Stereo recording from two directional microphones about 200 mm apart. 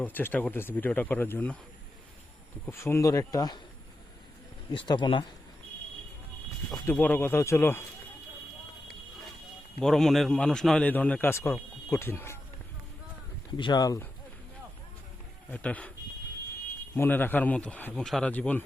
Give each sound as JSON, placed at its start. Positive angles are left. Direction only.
{"t": 0.0, "sound": "speech", "side_deg": 10}
{"t": 2.6, "sound": "speech", "side_deg": 15}
{"t": 4.7, "sound": "speech", "side_deg": 25}
{"t": 6.7, "sound": "speech", "side_deg": 10}
{"t": 9.8, "sound": "a man's voice", "side_deg": 0}
{"t": 13.6, "sound": "speech", "side_deg": 20}
{"t": 15.4, "sound": "speech", "side_deg": 5}
{"t": 16.9, "sound": "speech", "side_deg": 10}